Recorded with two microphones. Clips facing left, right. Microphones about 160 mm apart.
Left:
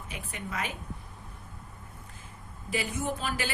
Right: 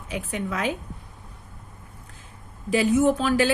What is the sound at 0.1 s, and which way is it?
Speech, 90° right.